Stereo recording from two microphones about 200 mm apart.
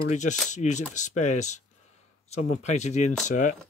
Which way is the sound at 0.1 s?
35° left (ahead or behind).